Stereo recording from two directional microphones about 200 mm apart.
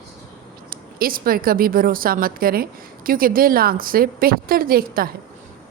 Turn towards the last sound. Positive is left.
turn(degrees=-45)  # may be behind; listen again after turning